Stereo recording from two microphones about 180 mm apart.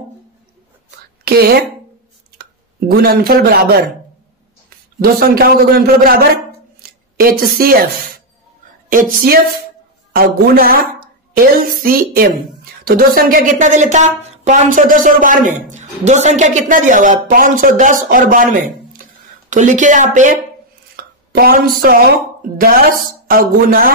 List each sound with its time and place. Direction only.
1.2 s a woman's voice: 60° right (ahead or behind)
2.9 s a man's voice: 60° right (ahead or behind)
8.9 s a man's voice: 55° right (ahead or behind)
20.9 s a sound: 55° right (ahead or behind)
22.6 s a woman's voice: 50° right (ahead or behind)